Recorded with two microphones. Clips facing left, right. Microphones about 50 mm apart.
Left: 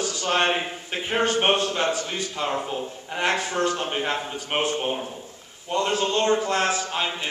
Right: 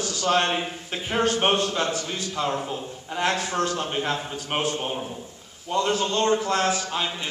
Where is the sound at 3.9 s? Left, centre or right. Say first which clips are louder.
Left 1 dB; centre.